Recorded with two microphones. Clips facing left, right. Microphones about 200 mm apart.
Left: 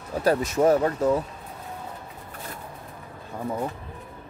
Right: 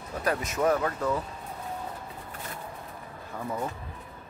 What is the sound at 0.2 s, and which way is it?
Speech, 30° left (ahead or behind).